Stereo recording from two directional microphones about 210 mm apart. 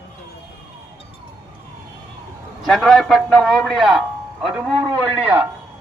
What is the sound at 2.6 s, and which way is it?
A man's voice, centre (ahead or behind).